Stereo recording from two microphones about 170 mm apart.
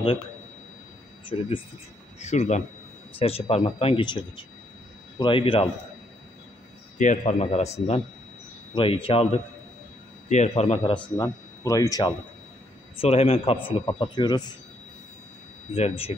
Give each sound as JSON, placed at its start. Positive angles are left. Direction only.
{"t": 1.2, "sound": "speech", "side_deg": 30}
{"t": 2.1, "sound": "speech", "side_deg": 40}
{"t": 5.2, "sound": "speech", "side_deg": 30}
{"t": 7.0, "sound": "speech", "side_deg": 45}
{"t": 11.1, "sound": "speech", "side_deg": 20}
{"t": 13.0, "sound": "speech", "side_deg": 35}
{"t": 15.7, "sound": "speech", "side_deg": 35}